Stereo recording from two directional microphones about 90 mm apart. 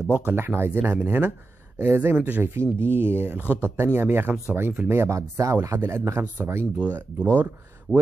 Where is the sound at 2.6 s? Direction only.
25° right (ahead or behind).